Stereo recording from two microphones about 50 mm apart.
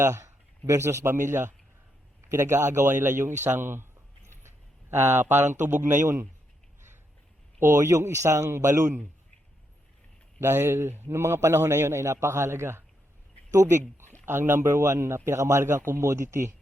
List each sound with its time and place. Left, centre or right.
0.0 s speech: right
0.7 s a man's voice: right
2.3 s a man's voice: right
3.0 s speech: right
4.3 s a sound: right
5.2 s speech: right
7.8 s a man's voice: right
10.4 s a man's voice: right
11.2 s a man's voice: right
13.5 s speech: right
14.3 s a man's voice: right